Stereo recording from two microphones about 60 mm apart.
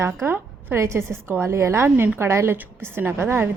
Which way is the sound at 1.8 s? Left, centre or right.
Right.